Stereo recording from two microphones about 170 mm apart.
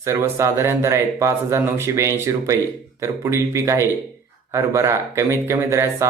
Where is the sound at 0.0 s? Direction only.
15° right (ahead or behind).